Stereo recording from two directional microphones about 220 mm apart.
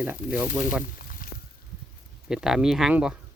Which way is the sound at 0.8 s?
40° left (ahead or behind).